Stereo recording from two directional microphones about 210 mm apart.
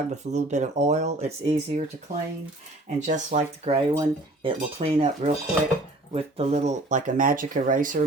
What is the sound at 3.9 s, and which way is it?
Cutlery, 20° right (ahead or behind).